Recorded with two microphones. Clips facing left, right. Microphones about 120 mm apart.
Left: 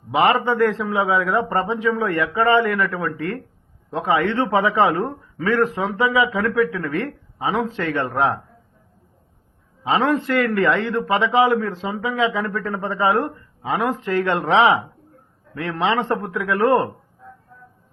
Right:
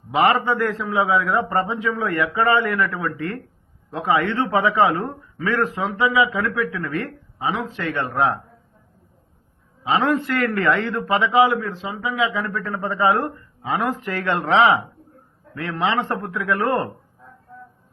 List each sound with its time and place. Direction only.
0.1 s a man's voice: 20° left (ahead or behind)
9.8 s a man's voice: 25° left (ahead or behind)